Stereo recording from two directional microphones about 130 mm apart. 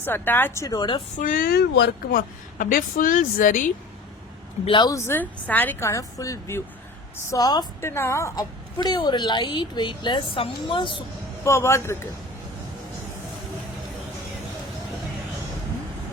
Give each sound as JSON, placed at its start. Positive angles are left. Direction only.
{"t": 0.0, "sound": "speech", "side_deg": 15}
{"t": 1.2, "sound": "a woman's voice", "side_deg": 90}
{"t": 4.6, "sound": "a woman's voice", "side_deg": 35}
{"t": 4.9, "sound": "a woman's voice", "side_deg": 20}
{"t": 7.8, "sound": "a woman's voice", "side_deg": 20}
{"t": 11.4, "sound": "speech", "side_deg": 20}